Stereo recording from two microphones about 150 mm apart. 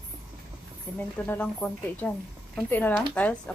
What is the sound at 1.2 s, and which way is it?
A woman's voice, 10° left (ahead or behind).